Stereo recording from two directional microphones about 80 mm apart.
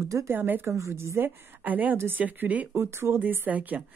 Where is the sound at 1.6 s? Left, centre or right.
Right.